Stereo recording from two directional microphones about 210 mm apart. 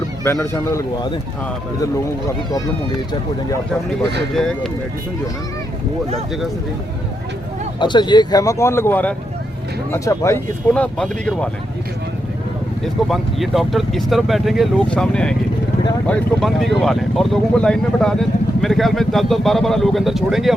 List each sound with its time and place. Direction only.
0.3 s speech: 15° left (ahead or behind)
4.4 s speech: centre (ahead or behind)
7.8 s speech: 20° left (ahead or behind); by 11.4 s 5° left (ahead or behind)
12.8 s speech: centre (ahead or behind)